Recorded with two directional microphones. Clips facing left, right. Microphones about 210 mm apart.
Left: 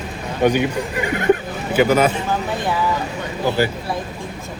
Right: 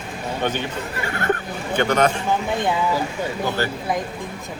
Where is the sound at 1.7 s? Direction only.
5° left (ahead or behind).